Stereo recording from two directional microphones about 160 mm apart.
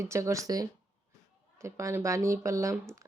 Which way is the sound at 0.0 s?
20° right (ahead or behind).